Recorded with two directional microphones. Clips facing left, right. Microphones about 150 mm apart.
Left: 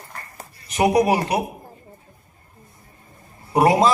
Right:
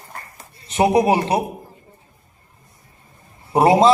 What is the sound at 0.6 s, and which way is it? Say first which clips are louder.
Speech: right 2 dB; 25° right (ahead or behind).